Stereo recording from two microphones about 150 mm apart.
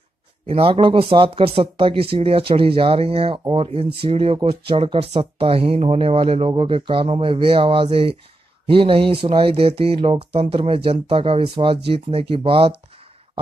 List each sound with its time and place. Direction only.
0.5 s speech: 40° right (ahead or behind)